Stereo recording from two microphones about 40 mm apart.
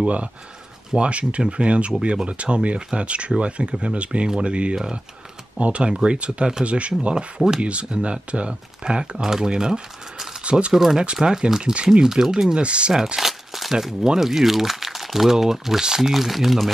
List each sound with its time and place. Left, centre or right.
0.0 s speech: right
7.6 s speech: right
10.4 s speech: right
10.7 s speech: centre
12.5 s speech: right
12.9 s crumpling: centre
14.2 s speech: centre